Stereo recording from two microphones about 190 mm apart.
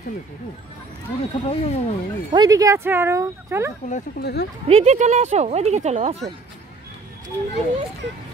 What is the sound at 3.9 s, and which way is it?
Speech, 40° left (ahead or behind).